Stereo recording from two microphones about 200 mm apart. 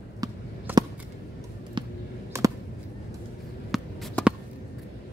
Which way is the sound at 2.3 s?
15° right (ahead or behind).